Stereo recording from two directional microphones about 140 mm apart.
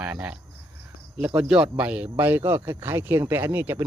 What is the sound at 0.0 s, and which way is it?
Speech, 10° right (ahead or behind).